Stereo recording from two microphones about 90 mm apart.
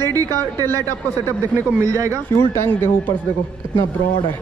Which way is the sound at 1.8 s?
35° right (ahead or behind).